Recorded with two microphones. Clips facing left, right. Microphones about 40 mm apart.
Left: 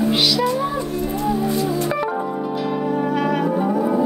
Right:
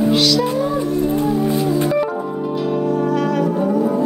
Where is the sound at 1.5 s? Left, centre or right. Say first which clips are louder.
Right 3 dB; right.